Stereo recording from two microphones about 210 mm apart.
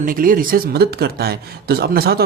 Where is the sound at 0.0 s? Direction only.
40° right (ahead or behind).